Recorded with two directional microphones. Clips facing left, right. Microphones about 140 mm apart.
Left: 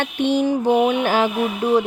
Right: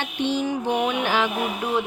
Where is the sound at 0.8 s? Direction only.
40° left (ahead or behind).